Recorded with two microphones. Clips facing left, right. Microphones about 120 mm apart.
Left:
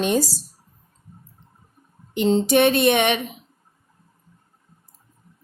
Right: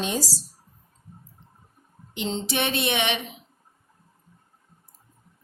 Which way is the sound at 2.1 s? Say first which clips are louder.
Left 10 dB; 50° left (ahead or behind).